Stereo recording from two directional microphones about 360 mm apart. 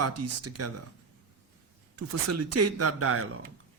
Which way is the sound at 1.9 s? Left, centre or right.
Right.